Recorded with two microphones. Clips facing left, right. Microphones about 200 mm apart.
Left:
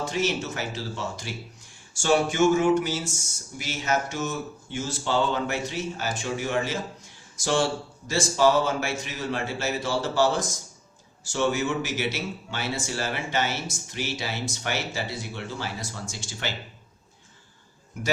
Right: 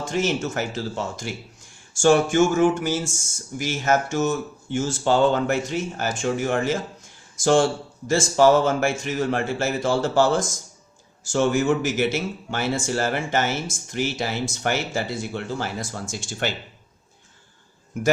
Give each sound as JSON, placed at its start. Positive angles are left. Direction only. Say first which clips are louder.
{"t": 0.0, "sound": "speech", "louder": "right 3 dB", "side_deg": -50}